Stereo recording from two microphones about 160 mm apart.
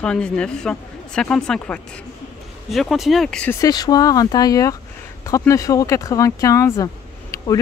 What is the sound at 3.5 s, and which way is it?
Speech, 20° left (ahead or behind).